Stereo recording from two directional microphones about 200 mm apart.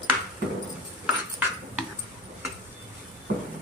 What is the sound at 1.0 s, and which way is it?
Cutlery, 5° right (ahead or behind).